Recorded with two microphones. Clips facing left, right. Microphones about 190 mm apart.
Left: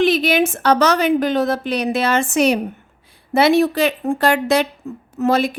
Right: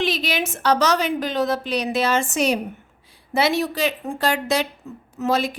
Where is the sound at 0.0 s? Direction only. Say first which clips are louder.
Left 8 dB; 55° left (ahead or behind).